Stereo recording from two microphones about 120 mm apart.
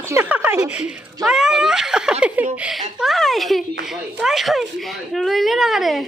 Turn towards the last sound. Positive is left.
turn(degrees=0)  # may be behind; listen again after turning